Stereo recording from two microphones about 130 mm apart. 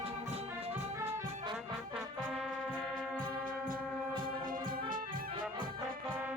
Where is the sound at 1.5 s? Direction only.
Centre (ahead or behind).